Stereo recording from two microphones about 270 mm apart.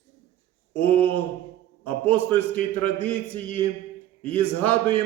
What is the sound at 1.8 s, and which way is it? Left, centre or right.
A man's voice, centre.